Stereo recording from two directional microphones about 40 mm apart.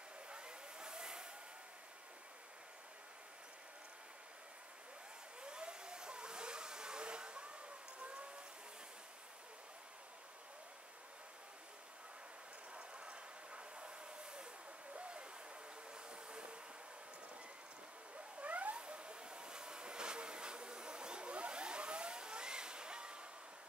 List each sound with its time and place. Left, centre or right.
0.3 s vehicle: right
5.4 s a sound: right
12.7 s vehicle: right
15.0 s owl: right
15.9 s vehicle: right
18.4 s a sound: right